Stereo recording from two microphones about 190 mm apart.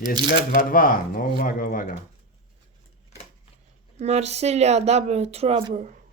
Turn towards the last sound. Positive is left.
turn(degrees=-35)  # may be behind; listen again after turning